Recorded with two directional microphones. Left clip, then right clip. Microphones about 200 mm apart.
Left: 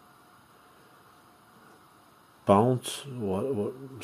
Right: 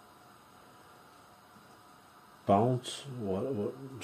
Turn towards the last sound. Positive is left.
turn(degrees=35)  # may be behind; listen again after turning